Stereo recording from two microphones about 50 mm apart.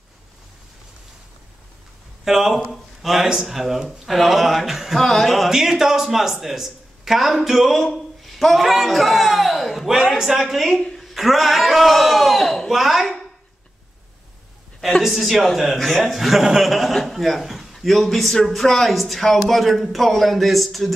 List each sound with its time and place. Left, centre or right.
2.2 s a man's voice: centre
10.1 s a man's voice: centre
15.0 s a man's voice: centre